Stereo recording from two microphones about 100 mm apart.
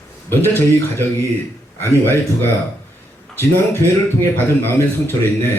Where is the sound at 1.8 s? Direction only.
20° left (ahead or behind).